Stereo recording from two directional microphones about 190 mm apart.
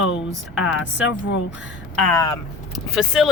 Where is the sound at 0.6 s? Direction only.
75° left (ahead or behind).